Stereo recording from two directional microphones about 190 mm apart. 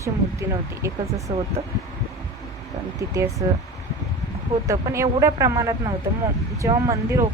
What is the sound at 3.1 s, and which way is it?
Speech, 15° right (ahead or behind).